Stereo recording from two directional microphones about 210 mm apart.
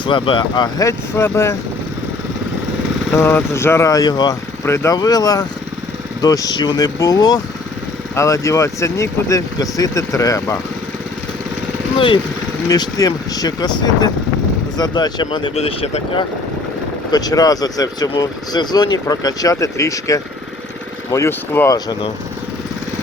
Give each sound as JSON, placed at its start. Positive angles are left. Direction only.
{"t": 0.0, "sound": "speech", "side_deg": 25}
{"t": 3.2, "sound": "speech", "side_deg": 10}
{"t": 11.9, "sound": "speech", "side_deg": 25}
{"t": 17.1, "sound": "speech", "side_deg": 20}